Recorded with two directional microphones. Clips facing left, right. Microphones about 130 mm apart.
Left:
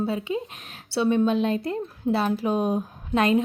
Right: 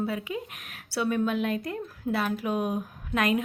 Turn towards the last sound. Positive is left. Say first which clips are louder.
# left 5 dB
turn(degrees=30)  # may be behind; listen again after turning